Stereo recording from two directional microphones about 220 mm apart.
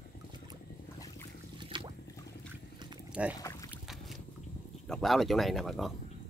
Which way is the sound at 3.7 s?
Centre (ahead or behind).